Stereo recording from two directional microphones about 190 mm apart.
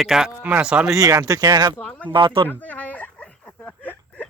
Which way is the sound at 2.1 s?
25° right (ahead or behind).